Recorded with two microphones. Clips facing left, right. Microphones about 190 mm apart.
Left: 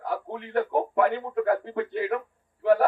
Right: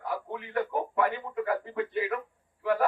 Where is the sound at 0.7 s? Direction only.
60° left (ahead or behind).